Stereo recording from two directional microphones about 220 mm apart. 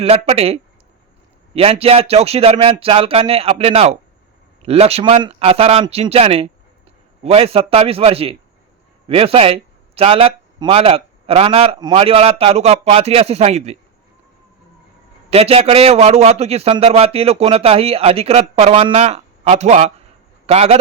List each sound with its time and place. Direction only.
0.0 s a man's voice: 25° right (ahead or behind)
15.3 s a man's voice: 25° right (ahead or behind)